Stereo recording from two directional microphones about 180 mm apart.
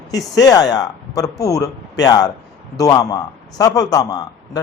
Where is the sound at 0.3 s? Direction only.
20° left (ahead or behind).